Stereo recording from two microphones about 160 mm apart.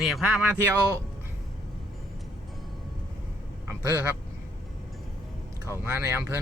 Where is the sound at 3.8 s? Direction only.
15° right (ahead or behind).